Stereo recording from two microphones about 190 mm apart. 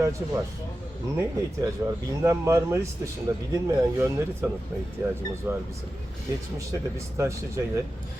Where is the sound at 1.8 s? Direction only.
15° right (ahead or behind).